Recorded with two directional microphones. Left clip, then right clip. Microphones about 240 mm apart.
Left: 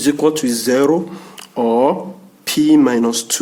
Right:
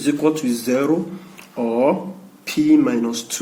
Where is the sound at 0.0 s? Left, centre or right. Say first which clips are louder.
Left 4 dB; left.